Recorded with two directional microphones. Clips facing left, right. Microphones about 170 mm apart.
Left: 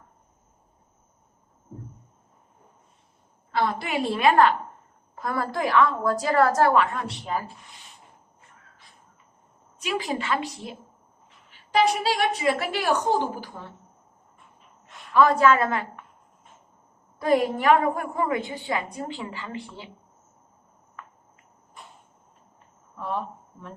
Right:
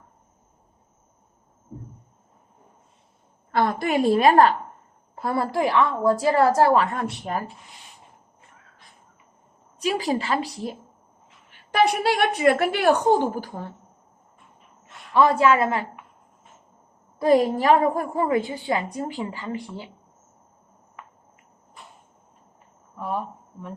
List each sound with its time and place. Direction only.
3.5 s a woman's voice: 50° right (ahead or behind)
5.2 s a woman's voice: 30° right (ahead or behind)
6.9 s speech: 50° right (ahead or behind)
9.8 s a woman's voice: 35° right (ahead or behind)
11.7 s a woman's voice: 60° right (ahead or behind)
15.1 s a woman's voice: 25° right (ahead or behind)
17.2 s a woman's voice: 30° right (ahead or behind)
23.0 s speech: 10° right (ahead or behind)